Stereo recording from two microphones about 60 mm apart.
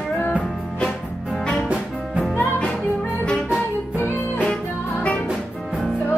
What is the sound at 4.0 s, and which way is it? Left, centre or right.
Music, left.